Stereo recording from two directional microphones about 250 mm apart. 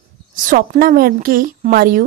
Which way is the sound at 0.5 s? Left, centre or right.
Right.